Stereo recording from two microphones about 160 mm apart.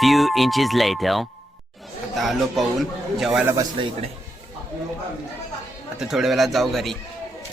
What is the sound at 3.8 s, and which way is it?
Speech, 30° right (ahead or behind).